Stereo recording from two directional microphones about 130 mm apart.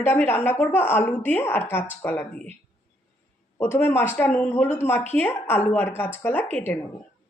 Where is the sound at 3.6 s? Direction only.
15° left (ahead or behind).